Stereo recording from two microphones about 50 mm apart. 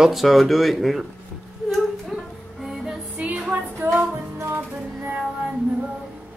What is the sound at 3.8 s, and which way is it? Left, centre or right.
Music, right.